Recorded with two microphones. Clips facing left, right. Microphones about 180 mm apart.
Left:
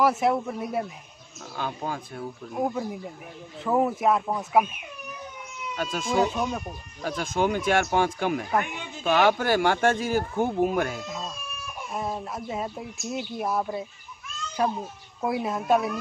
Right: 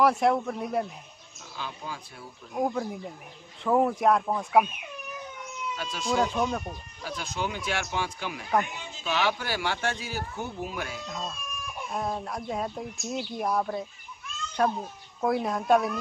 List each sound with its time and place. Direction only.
0.0 s speech: 5° left (ahead or behind)
1.6 s speech: 50° left (ahead or behind)
2.5 s speech: 5° left (ahead or behind)
5.8 s speech: 50° left (ahead or behind)
6.2 s speech: 5° left (ahead or behind)
7.0 s speech: 50° left (ahead or behind)
11.1 s chicken: centre (ahead or behind)
11.9 s speech: 5° left (ahead or behind)